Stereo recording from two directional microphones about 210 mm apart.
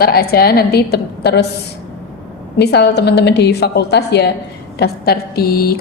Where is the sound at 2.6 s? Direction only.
50° left (ahead or behind).